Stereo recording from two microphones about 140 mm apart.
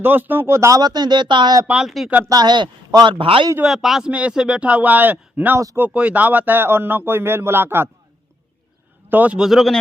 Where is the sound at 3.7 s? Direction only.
Centre (ahead or behind).